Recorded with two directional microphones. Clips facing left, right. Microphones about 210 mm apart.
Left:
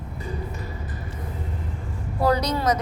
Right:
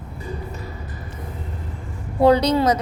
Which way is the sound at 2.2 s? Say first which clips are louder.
Right 6 dB; 30° right (ahead or behind).